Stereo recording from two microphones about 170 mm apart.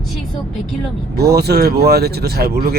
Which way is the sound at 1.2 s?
75° right (ahead or behind).